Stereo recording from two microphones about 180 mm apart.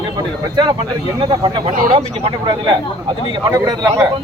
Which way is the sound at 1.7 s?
50° right (ahead or behind).